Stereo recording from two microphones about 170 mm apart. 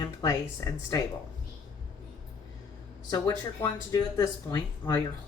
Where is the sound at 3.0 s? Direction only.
25° left (ahead or behind).